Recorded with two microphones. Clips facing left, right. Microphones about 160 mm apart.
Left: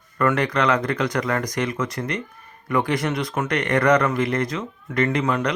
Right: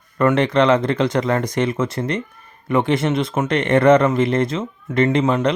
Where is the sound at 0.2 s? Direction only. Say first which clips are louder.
Right 5 dB; 25° right (ahead or behind).